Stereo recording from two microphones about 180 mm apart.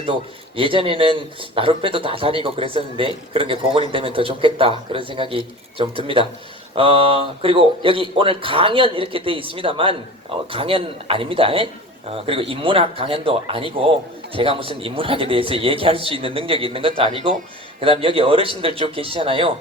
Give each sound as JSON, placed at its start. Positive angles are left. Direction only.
{"t": 0.5, "sound": "a man's voice", "side_deg": -30}